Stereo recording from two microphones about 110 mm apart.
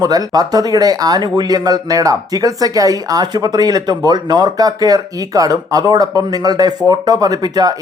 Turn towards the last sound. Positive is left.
turn(degrees=-35)  # may be behind; listen again after turning